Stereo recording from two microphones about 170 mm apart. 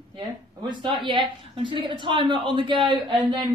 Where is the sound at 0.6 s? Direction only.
25° right (ahead or behind).